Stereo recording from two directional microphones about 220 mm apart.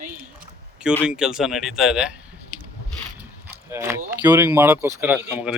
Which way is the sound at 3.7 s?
10° right (ahead or behind).